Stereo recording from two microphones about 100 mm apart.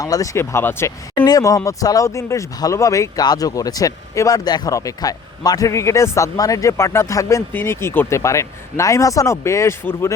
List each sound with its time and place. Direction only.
0.0 s speech: 35° left (ahead or behind)
1.2 s speech: 35° left (ahead or behind)